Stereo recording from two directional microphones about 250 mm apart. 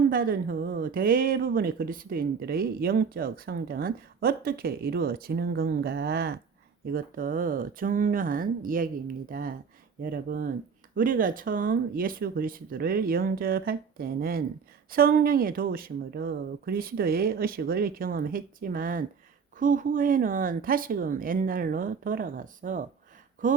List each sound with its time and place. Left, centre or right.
0.1 s speech: right